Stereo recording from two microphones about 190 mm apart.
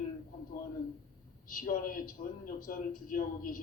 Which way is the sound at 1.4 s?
45° left (ahead or behind).